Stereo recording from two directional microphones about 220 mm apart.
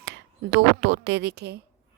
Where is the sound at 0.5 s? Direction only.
55° right (ahead or behind).